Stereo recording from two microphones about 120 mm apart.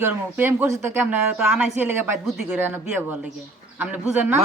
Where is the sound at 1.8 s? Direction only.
15° right (ahead or behind).